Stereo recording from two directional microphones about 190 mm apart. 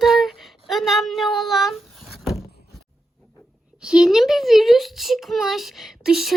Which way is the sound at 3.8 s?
5° right (ahead or behind).